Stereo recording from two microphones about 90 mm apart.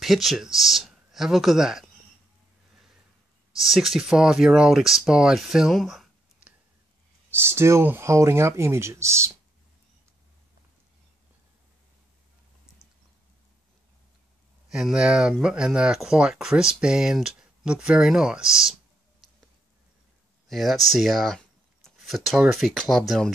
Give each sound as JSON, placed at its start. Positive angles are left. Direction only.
{"t": 0.0, "sound": "speech", "side_deg": 0}
{"t": 3.6, "sound": "speech", "side_deg": -5}
{"t": 7.2, "sound": "speech", "side_deg": -30}
{"t": 14.7, "sound": "speech", "side_deg": -5}
{"t": 20.4, "sound": "speech", "side_deg": 0}
{"t": 21.4, "sound": "a sound", "side_deg": 5}
{"t": 22.5, "sound": "speech", "side_deg": 0}